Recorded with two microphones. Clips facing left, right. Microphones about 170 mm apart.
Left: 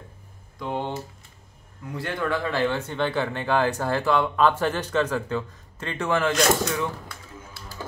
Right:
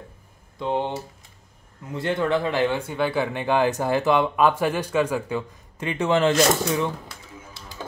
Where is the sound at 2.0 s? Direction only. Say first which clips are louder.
Right 4 dB; 20° right (ahead or behind).